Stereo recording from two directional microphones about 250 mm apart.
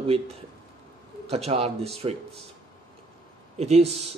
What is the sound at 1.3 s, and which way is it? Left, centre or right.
Speech, right.